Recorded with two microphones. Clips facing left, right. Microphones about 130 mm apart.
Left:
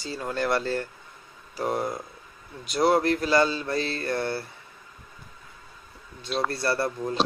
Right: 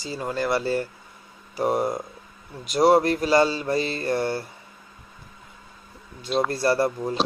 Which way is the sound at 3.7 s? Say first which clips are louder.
Right 4 dB; 15° right (ahead or behind).